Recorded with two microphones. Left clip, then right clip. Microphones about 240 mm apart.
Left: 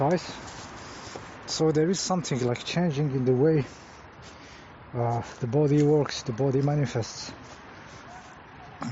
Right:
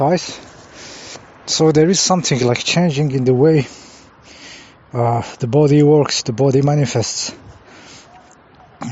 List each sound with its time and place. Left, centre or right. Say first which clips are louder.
0.0 s speech: right 10 dB; right
1.5 s speech: right 11 dB; right
4.9 s speech: right 11 dB; right
8.8 s music: right 7 dB; right